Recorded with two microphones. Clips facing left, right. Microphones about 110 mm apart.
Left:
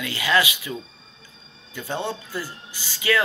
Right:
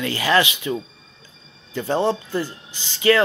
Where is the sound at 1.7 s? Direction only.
35° right (ahead or behind).